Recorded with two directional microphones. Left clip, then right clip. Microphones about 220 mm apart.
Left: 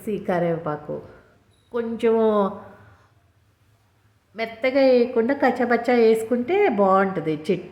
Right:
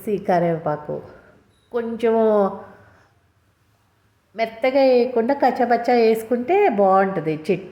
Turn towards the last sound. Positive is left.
turn(degrees=-5)  # may be behind; listen again after turning